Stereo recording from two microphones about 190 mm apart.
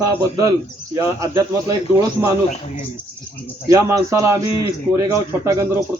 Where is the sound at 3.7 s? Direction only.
15° right (ahead or behind).